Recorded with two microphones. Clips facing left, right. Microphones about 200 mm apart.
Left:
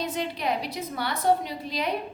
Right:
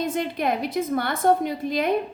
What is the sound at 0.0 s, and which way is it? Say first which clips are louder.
A woman's voice: right 4 dB; 50° right (ahead or behind).